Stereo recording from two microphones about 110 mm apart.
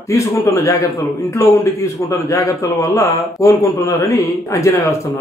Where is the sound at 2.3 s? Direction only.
30° left (ahead or behind).